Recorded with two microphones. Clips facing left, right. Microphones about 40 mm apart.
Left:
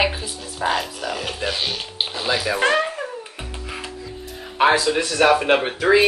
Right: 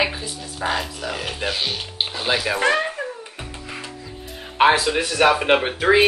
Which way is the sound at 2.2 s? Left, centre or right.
Right.